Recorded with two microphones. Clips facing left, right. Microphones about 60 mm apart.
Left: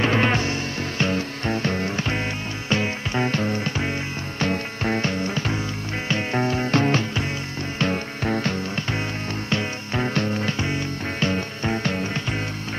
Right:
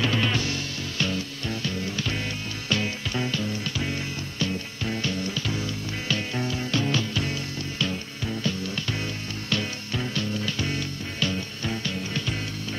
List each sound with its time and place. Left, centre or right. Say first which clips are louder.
0.0 s music: left 5 dB; left
3.3 s music: left 5 dB; left
9.5 s music: left 2 dB; left
10.6 s music: left 4 dB; left